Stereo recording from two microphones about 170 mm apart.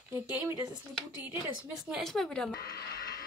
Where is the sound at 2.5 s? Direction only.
65° left (ahead or behind).